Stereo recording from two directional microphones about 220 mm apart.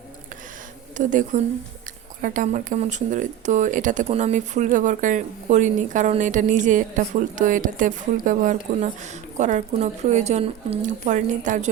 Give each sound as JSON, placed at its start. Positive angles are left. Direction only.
{"t": 0.9, "sound": "speech", "side_deg": -35}